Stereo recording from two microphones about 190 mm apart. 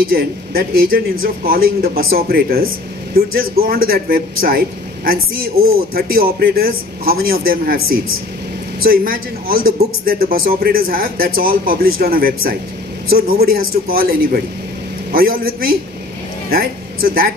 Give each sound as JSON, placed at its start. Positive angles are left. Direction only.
{"t": 0.0, "sound": "speech", "side_deg": -50}
{"t": 15.1, "sound": "speech", "side_deg": -50}